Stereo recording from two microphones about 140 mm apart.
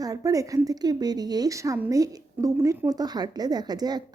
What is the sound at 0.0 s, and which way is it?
A woman's voice, 25° right (ahead or behind).